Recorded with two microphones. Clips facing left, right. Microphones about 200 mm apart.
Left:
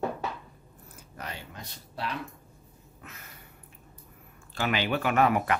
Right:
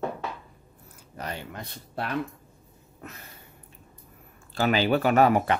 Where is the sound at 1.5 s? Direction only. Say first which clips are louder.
Right 5 dB; 55° right (ahead or behind).